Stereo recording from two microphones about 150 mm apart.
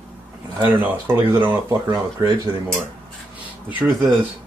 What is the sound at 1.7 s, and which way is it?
Speech, 30° right (ahead or behind).